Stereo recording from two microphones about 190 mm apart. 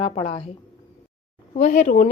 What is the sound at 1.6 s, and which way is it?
Speech, 40° left (ahead or behind).